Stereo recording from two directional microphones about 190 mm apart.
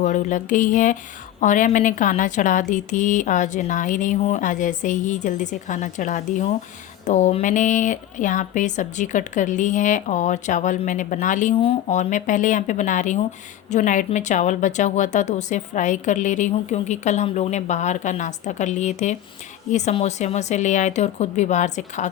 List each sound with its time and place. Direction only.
0.0 s speech: 40° left (ahead or behind)